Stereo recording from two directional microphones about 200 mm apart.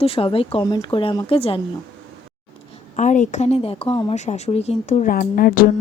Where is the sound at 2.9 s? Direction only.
35° left (ahead or behind).